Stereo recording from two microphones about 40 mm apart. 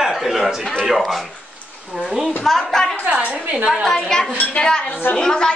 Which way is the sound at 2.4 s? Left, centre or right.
Centre.